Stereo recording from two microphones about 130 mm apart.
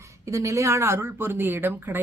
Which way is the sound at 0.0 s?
25° right (ahead or behind).